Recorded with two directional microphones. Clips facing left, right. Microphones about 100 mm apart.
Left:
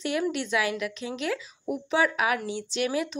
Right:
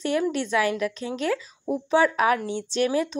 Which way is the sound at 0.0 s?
40° right (ahead or behind).